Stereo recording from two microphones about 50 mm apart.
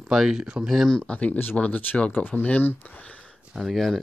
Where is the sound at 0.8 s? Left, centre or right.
Centre.